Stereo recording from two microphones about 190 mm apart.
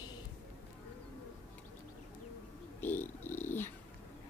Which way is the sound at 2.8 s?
10° left (ahead or behind).